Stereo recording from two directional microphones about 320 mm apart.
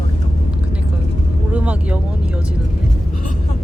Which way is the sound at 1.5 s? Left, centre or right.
Centre.